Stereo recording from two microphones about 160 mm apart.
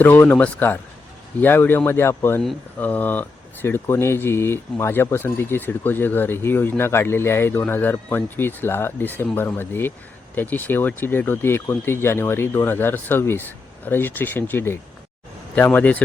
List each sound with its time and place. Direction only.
0.0 s speech: 10° left (ahead or behind)